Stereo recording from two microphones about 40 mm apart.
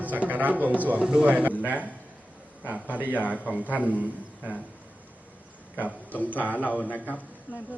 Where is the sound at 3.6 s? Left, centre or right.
Right.